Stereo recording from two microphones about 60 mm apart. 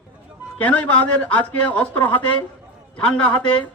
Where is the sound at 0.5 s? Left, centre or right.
Left.